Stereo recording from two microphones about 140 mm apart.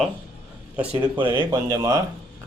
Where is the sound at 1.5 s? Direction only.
20° right (ahead or behind).